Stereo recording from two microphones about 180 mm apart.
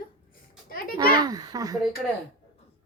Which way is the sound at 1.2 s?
20° right (ahead or behind).